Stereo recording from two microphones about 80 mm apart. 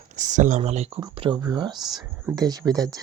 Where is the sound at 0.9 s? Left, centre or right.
Right.